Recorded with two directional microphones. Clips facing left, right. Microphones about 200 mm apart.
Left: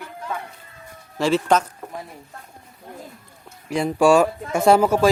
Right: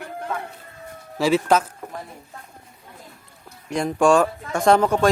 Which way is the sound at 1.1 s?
5° right (ahead or behind).